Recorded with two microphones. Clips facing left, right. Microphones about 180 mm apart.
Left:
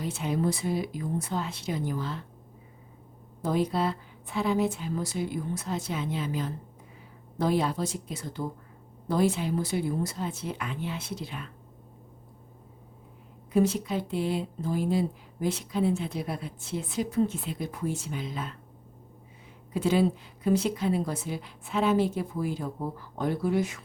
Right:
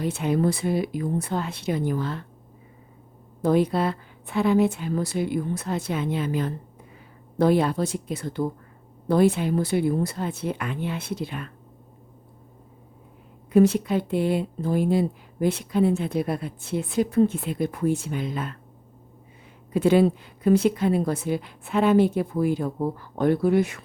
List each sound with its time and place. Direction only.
0.0 s speech: 60° right (ahead or behind)
3.4 s speech: 65° right (ahead or behind)
13.5 s speech: 65° right (ahead or behind)
19.7 s speech: 60° right (ahead or behind)